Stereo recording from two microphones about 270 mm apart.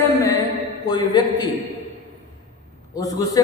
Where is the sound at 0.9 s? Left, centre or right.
Centre.